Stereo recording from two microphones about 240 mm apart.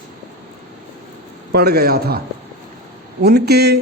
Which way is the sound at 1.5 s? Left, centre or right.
Right.